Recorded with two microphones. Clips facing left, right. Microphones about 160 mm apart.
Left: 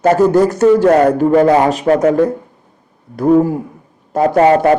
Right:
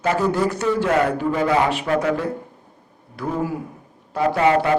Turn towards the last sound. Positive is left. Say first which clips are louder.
# left 7 dB
turn(degrees=45)  # may be behind; listen again after turning